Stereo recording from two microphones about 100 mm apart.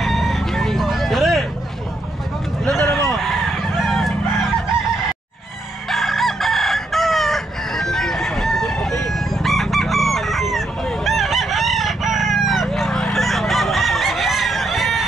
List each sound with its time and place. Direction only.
0.0 s chicken: centre (ahead or behind)
2.6 s a sound: 10° left (ahead or behind)
3.1 s chicken: centre (ahead or behind)
5.9 s chicken: centre (ahead or behind)